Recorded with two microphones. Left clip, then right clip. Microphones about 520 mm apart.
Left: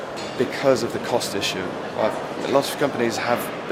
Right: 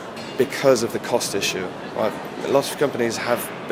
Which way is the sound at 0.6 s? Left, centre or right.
Right.